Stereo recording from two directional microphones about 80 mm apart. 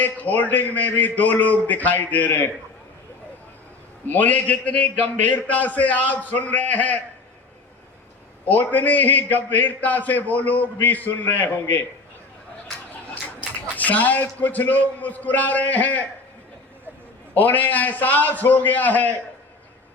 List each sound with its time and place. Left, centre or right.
0.0 s a man's voice: left
4.0 s a man's voice: left
8.4 s a man's voice: left
13.4 s a man's voice: centre
17.3 s a man's voice: left